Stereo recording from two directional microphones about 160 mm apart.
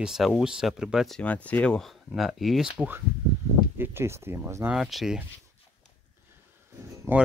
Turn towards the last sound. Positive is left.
turn(degrees=-15)  # may be behind; listen again after turning